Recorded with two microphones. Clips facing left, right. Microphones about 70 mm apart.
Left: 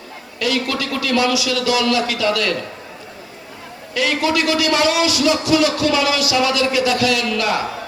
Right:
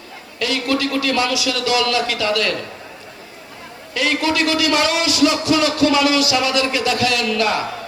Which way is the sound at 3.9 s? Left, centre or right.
Right.